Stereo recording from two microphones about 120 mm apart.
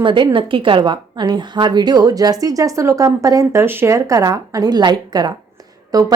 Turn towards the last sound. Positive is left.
turn(degrees=-30)  # may be behind; listen again after turning